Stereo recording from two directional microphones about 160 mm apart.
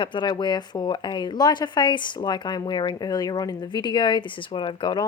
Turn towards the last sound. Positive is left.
turn(degrees=30)  # may be behind; listen again after turning